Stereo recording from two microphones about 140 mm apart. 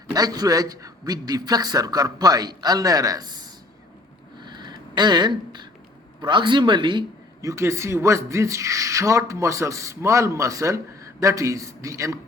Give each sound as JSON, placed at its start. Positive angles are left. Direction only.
{"t": 0.1, "sound": "speech", "side_deg": -25}
{"t": 4.4, "sound": "a sound", "side_deg": -30}
{"t": 6.2, "sound": "speech", "side_deg": -35}
{"t": 7.4, "sound": "speech", "side_deg": -20}